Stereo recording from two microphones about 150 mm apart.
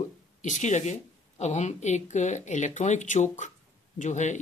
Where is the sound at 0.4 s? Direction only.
55° left (ahead or behind).